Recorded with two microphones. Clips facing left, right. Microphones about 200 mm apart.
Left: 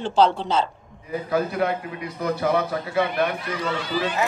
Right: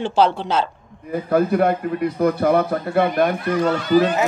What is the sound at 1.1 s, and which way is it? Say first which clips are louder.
A man's voice: right 6 dB; 50° right (ahead or behind).